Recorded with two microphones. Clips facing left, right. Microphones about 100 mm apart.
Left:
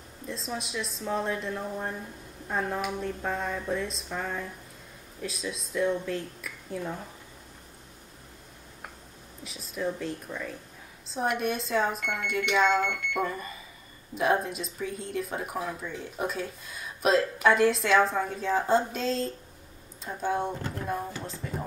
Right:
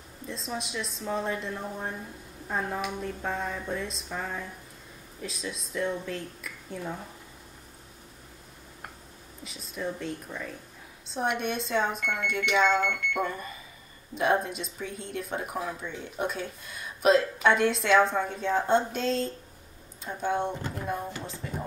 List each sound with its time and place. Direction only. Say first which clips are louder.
0.3 s speech: even; centre (ahead or behind)
9.4 s speech: left 3 dB; centre (ahead or behind)
21.2 s a sound: left 1 dB; centre (ahead or behind)